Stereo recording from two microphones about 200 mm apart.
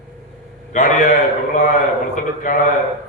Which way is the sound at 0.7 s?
40° left (ahead or behind).